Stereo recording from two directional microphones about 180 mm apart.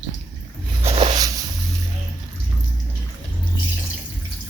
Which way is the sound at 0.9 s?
35° right (ahead or behind).